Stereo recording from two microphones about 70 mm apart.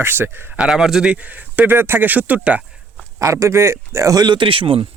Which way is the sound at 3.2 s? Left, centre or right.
Right.